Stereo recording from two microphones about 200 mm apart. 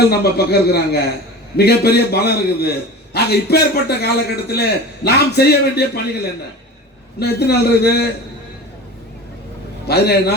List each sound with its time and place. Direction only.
0.1 s a man's voice: 50° left (ahead or behind)
7.2 s a man's voice: 55° left (ahead or behind)
9.8 s a man's voice: 55° left (ahead or behind)